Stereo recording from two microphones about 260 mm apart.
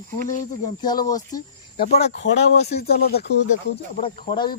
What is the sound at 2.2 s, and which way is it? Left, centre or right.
Speech, left.